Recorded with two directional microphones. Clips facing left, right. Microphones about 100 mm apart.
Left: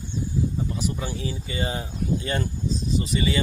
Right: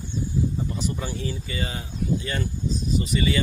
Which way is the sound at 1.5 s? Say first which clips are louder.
Left 3 dB; 30° left (ahead or behind).